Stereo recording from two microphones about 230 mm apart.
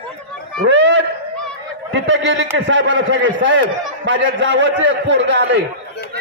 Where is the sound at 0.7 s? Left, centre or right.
Right.